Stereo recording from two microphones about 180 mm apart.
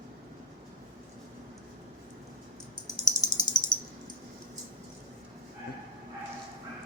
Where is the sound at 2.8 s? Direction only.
20° left (ahead or behind).